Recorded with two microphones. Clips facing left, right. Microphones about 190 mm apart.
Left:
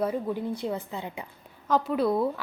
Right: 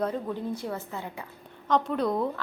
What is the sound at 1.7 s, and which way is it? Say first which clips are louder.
Speech: left 1 dB; 5° left (ahead or behind).